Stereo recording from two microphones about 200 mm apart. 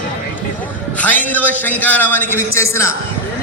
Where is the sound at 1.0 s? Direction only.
10° left (ahead or behind).